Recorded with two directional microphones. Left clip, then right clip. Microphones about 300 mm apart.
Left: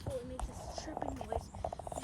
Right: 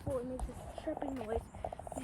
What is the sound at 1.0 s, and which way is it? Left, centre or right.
Speech, centre.